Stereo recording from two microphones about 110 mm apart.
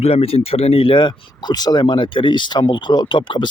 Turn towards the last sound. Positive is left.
turn(degrees=45)  # may be behind; listen again after turning